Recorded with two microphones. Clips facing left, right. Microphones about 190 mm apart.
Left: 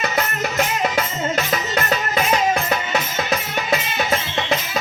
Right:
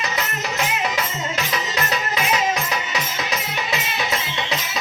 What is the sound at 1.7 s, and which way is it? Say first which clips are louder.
Music: left 5 dB; 50° left (ahead or behind).